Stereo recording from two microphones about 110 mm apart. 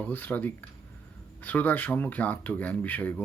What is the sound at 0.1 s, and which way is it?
Speech, 15° left (ahead or behind).